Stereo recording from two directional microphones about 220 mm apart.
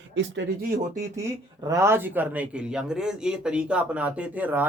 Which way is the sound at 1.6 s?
15° right (ahead or behind).